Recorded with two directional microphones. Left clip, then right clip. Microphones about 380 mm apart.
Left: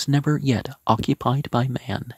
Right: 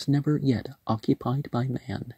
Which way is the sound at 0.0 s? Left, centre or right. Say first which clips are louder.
Left 3 dB; centre.